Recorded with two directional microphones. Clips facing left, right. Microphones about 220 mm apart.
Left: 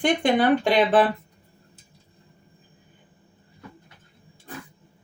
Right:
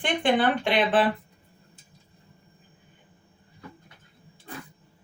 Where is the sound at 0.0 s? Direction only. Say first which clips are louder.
Left 3 dB; 40° left (ahead or behind).